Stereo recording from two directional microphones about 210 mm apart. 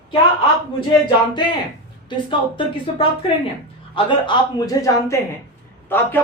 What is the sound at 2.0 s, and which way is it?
A woman's voice, 25° left (ahead or behind).